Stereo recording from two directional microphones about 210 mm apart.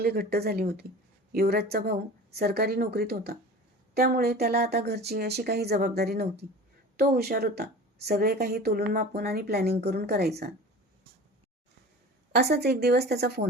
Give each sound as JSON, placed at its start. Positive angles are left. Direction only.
{"t": 0.0, "sound": "a woman's voice", "side_deg": -50}
{"t": 12.3, "sound": "a woman's voice", "side_deg": -50}